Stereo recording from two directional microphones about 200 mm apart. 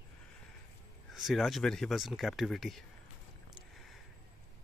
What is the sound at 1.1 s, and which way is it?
Speech, centre (ahead or behind).